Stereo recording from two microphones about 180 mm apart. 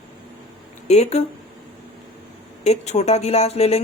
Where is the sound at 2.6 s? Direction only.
40° left (ahead or behind).